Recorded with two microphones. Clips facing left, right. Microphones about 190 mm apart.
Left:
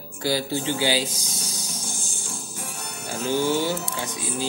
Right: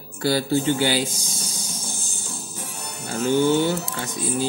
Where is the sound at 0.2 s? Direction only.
55° right (ahead or behind).